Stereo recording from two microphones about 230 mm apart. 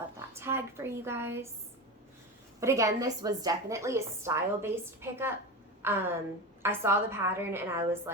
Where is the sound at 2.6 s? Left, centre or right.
Centre.